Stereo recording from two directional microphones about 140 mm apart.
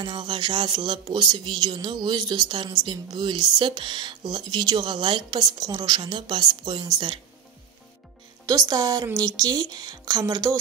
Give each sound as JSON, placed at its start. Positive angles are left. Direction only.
{"t": 0.0, "sound": "speech", "side_deg": -35}
{"t": 8.5, "sound": "a woman's voice", "side_deg": -25}